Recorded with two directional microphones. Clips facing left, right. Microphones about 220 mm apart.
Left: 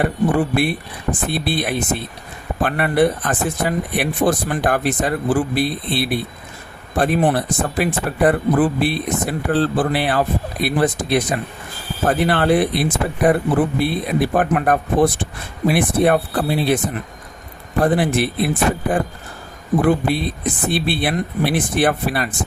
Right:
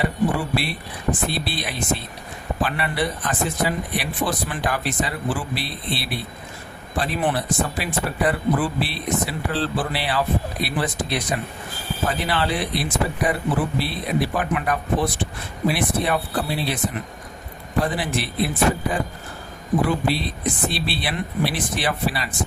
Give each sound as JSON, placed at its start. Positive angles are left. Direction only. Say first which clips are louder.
{"t": 0.0, "sound": "speech", "louder": "left 5 dB", "side_deg": 50}